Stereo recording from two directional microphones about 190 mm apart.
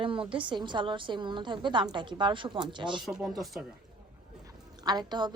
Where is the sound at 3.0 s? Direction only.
Centre (ahead or behind).